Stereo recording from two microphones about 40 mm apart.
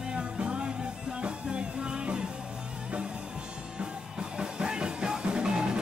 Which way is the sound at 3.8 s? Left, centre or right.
Right.